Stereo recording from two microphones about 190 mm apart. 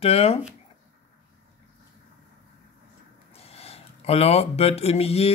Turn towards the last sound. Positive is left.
turn(degrees=35)  # may be behind; listen again after turning